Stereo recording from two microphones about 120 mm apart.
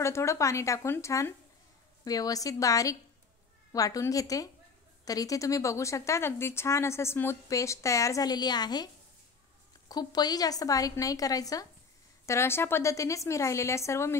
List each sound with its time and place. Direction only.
0.0 s speech: 25° left (ahead or behind)